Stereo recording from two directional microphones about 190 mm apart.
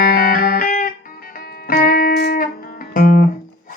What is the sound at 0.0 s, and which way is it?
Music, 50° left (ahead or behind).